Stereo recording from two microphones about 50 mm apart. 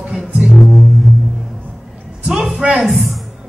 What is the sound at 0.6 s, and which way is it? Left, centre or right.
Music, centre.